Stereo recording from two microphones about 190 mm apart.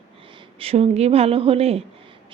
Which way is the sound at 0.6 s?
30° right (ahead or behind).